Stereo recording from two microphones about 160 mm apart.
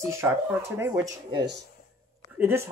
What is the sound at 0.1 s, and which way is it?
Speech, 15° right (ahead or behind).